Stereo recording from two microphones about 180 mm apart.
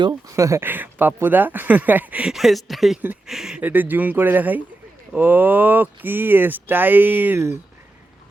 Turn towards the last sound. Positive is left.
turn(degrees=-15)  # may be behind; listen again after turning